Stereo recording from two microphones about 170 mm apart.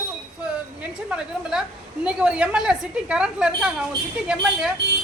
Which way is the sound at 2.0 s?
5° right (ahead or behind).